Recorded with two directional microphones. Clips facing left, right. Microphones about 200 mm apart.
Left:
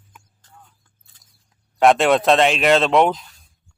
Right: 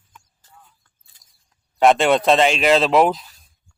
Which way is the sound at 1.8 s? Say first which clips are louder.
Even; centre (ahead or behind).